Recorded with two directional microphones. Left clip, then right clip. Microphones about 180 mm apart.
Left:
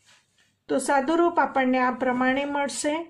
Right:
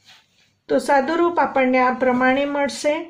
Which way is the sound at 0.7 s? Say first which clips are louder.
Right 5 dB; 35° left (ahead or behind).